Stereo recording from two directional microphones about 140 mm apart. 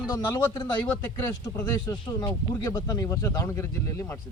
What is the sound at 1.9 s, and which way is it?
Speech, 30° left (ahead or behind).